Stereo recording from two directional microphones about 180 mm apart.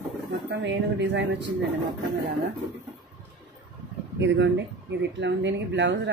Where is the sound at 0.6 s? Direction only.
75° right (ahead or behind).